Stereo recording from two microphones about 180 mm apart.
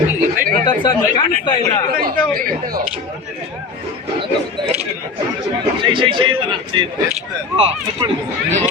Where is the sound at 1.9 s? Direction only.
55° right (ahead or behind).